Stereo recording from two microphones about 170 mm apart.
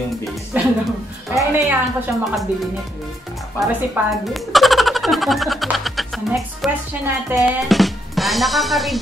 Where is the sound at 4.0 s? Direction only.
10° right (ahead or behind).